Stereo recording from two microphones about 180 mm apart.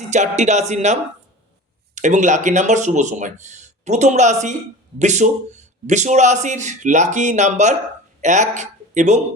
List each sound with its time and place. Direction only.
0.1 s a man's voice: 40° right (ahead or behind)
2.0 s a man's voice: 40° right (ahead or behind)